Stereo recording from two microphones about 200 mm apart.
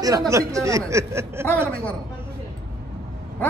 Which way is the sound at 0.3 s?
15° right (ahead or behind).